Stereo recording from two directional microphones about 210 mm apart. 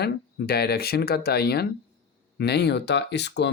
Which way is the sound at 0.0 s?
50° left (ahead or behind).